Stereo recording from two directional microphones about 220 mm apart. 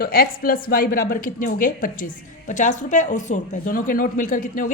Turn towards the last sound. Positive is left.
turn(degrees=40)  # may be behind; listen again after turning